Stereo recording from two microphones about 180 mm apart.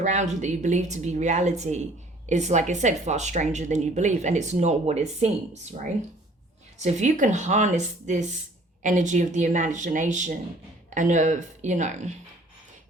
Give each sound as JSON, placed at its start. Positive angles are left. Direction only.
{"t": 0.0, "sound": "speech", "side_deg": -40}
{"t": 6.7, "sound": "speech", "side_deg": -40}